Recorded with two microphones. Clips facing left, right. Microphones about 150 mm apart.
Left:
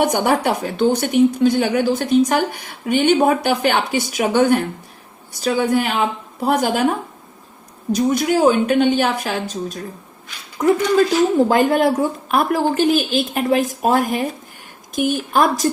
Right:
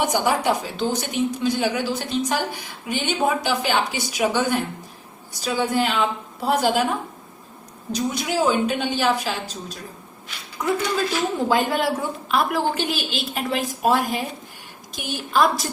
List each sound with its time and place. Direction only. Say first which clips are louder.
0.0 s a woman's voice: left 4 dB; 60° left (ahead or behind)
7.9 s a woman's voice: left 6 dB; 55° left (ahead or behind)
11.4 s a woman's voice: left 6 dB; 45° left (ahead or behind)